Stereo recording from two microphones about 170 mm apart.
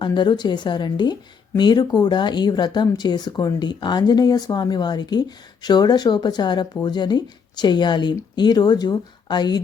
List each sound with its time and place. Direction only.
0.0 s speech: 25° left (ahead or behind)